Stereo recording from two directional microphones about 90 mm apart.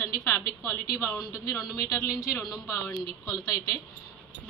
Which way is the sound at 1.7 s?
35° left (ahead or behind).